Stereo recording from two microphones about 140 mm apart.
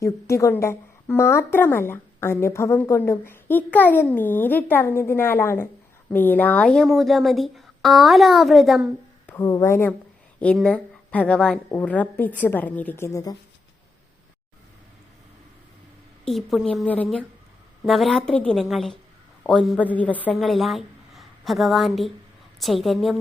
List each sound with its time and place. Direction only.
0.0 s speech: 20° left (ahead or behind); by 8.8 s centre (ahead or behind)
9.2 s speech: 20° left (ahead or behind)
10.4 s a woman's voice: 5° left (ahead or behind)
16.2 s speech: centre (ahead or behind)
16.8 s speech: 10° left (ahead or behind)
17.8 s speech: centre (ahead or behind)
20.3 s a woman's voice: centre (ahead or behind)